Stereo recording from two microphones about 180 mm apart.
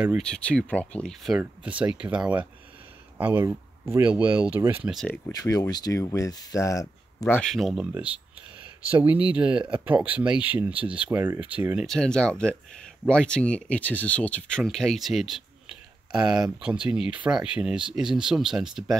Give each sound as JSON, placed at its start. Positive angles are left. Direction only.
{"t": 0.2, "sound": "speech", "side_deg": 5}
{"t": 4.9, "sound": "speech", "side_deg": 5}
{"t": 5.3, "sound": "speech", "side_deg": 20}
{"t": 7.4, "sound": "speech", "side_deg": 0}